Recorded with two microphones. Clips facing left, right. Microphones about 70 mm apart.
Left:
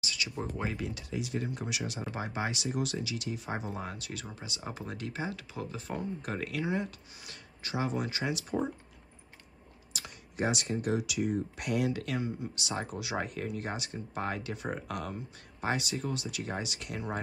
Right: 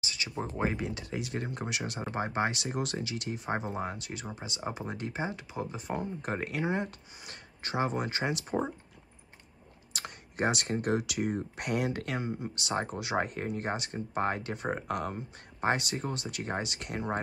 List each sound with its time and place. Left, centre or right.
0.0 s speech: right
1.1 s speech: right
9.9 s speech: right